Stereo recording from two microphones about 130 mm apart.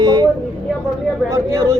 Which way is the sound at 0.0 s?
30° right (ahead or behind).